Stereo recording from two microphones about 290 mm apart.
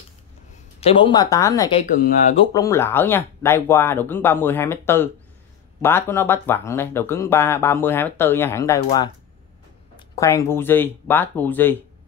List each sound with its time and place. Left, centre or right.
0.7 s speech: centre
2.0 s speech: left
2.5 s speech: centre